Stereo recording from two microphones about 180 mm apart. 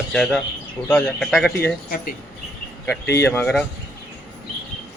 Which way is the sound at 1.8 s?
50° left (ahead or behind).